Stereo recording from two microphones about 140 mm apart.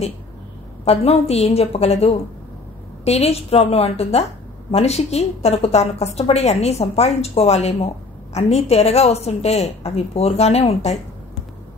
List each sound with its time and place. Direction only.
0.8 s a woman's voice: 50° left (ahead or behind)